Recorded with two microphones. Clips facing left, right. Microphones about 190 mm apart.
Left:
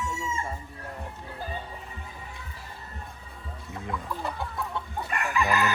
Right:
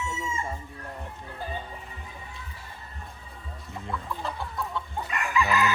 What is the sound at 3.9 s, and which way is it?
Speech, 20° left (ahead or behind).